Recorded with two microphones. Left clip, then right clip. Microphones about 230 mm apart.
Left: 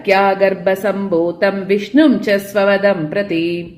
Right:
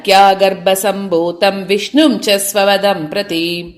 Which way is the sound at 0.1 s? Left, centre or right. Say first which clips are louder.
Right 4 dB; right.